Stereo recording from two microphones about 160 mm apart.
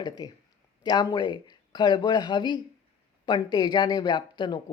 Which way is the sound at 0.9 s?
25° left (ahead or behind).